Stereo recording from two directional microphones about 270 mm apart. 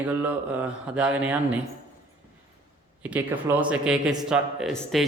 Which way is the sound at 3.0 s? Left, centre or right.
Centre.